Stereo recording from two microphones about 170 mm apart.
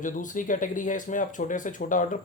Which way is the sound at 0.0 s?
50° left (ahead or behind).